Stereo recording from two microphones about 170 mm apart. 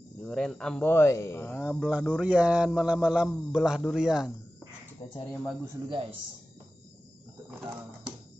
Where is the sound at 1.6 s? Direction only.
5° right (ahead or behind).